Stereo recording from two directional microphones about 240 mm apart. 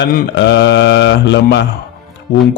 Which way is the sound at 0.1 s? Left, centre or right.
Left.